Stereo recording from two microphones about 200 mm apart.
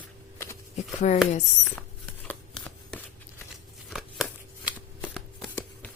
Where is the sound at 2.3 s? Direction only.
5° left (ahead or behind).